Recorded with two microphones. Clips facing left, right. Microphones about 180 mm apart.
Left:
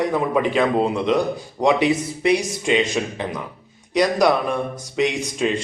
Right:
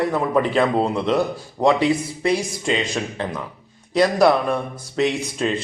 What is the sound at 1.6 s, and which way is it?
Speech, 20° left (ahead or behind).